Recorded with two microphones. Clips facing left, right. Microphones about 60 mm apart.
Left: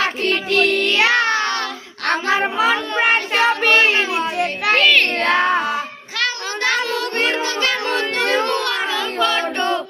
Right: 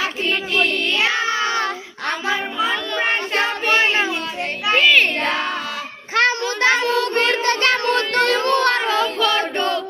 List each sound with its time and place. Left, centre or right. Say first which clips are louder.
0.0 s music: left 3 dB; centre
0.7 s child singing: left 4 dB; left
2.3 s child singing: left 5 dB; left
4.4 s a sound: left 1 dB; left
4.8 s child singing: right 1 dB; centre
5.3 s child singing: left 7 dB; left
6.1 s child singing: right 5 dB; right
7.4 s a sound: right 3 dB; right
7.9 s child singing: right 2 dB; centre
8.4 s a sound: right 4 dB; right
9.1 s choir: even; left